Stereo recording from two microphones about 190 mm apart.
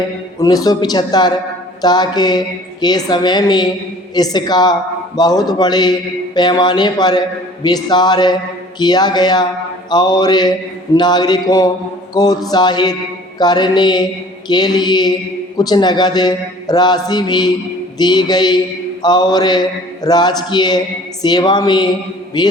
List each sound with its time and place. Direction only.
0.3 s a man's voice: 20° left (ahead or behind)